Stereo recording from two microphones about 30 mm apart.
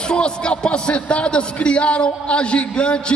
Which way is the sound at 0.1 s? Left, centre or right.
Left.